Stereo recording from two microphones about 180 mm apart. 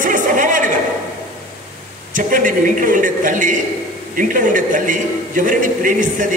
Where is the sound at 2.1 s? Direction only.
45° right (ahead or behind).